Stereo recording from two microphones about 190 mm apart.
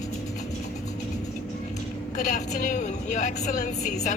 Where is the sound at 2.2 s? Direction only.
40° left (ahead or behind).